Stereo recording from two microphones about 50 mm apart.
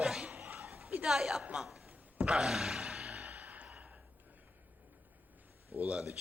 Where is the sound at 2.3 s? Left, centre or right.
Centre.